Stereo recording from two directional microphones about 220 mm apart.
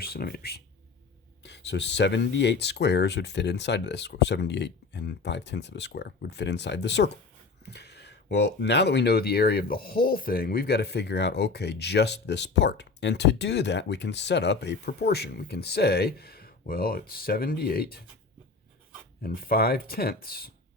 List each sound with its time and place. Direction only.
0.0 s speech: 45° left (ahead or behind)
19.2 s speech: 45° left (ahead or behind)